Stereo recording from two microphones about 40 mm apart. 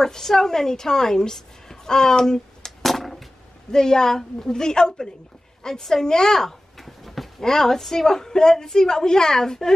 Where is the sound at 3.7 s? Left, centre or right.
Centre.